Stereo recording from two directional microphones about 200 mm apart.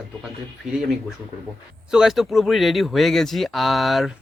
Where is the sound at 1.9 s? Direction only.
Centre (ahead or behind).